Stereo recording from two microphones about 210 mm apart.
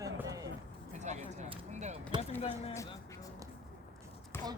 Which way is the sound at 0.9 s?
35° right (ahead or behind).